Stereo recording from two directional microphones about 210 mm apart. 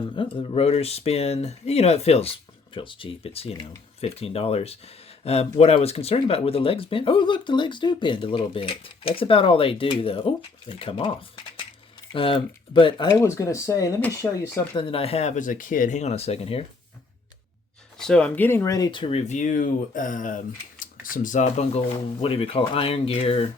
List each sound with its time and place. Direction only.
0.2 s speech: 25° left (ahead or behind)
12.1 s speech: 25° left (ahead or behind)
14.8 s speech: 25° left (ahead or behind)
17.9 s speech: 5° left (ahead or behind); by 23.5 s 25° left (ahead or behind)